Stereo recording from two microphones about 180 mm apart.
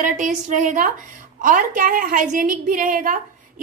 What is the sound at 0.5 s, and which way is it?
A woman's voice, 45° right (ahead or behind).